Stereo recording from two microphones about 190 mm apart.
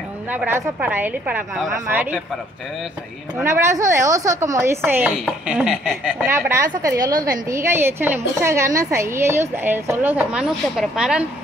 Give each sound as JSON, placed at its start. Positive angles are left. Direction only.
{"t": 0.3, "sound": "a woman's voice", "side_deg": -10}
{"t": 3.4, "sound": "a woman's voice", "side_deg": -15}